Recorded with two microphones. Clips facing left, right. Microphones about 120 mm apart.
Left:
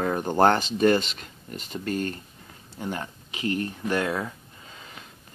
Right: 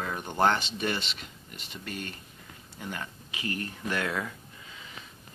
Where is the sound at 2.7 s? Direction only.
30° left (ahead or behind).